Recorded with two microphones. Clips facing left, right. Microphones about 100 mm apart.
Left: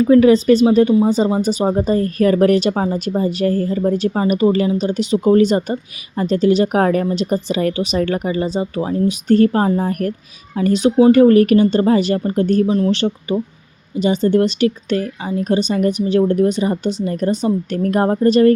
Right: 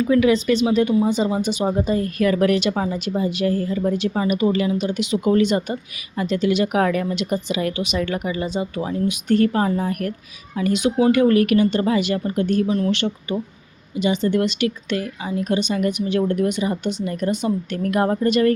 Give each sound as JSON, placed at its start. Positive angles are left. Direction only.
{"t": 0.0, "sound": "speech", "side_deg": 35}